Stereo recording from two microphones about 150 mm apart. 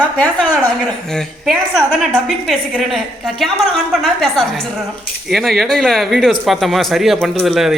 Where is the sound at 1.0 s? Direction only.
5° left (ahead or behind).